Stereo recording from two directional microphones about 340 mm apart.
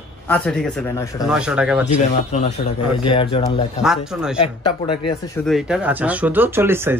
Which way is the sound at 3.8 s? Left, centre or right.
Centre.